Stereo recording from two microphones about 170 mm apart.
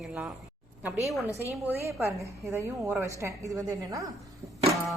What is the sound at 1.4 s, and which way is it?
A woman's voice, 15° right (ahead or behind).